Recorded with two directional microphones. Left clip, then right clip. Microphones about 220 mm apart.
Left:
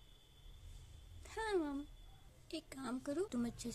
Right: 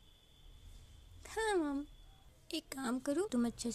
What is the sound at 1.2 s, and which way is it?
Speech, 20° right (ahead or behind).